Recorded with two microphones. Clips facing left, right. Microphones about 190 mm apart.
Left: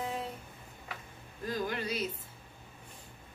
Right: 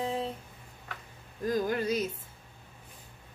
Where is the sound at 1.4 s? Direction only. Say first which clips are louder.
Right 6 dB; 45° right (ahead or behind).